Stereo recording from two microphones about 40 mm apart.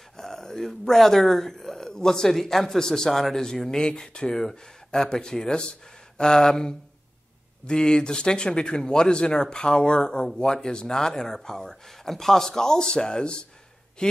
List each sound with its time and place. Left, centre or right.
0.2 s speech: centre
3.8 s speech: centre